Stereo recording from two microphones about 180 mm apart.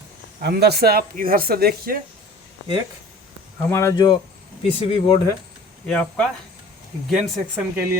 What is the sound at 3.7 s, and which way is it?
Speech, 15° left (ahead or behind).